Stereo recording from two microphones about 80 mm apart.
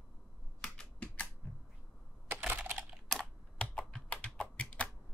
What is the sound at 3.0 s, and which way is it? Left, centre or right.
Computer keyboard, centre.